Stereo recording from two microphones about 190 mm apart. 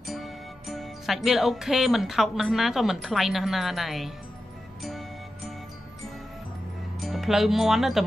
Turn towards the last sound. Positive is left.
turn(degrees=0)  # may be behind; listen again after turning